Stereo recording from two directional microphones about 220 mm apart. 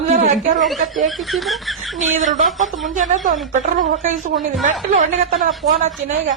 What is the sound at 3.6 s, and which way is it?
A woman's voice, 35° right (ahead or behind).